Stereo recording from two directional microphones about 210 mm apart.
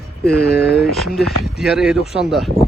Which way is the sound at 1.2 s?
Centre (ahead or behind).